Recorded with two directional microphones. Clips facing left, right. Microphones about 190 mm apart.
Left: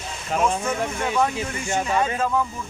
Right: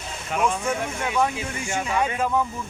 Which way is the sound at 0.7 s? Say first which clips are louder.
Left 2 dB; 5° right (ahead or behind).